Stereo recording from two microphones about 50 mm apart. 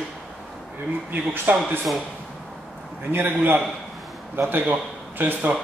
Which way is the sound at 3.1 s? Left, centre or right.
Right.